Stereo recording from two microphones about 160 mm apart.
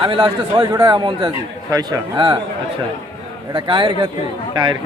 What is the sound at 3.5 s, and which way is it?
Speech, 30° right (ahead or behind).